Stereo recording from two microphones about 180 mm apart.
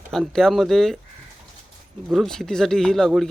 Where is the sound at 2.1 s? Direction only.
Centre (ahead or behind).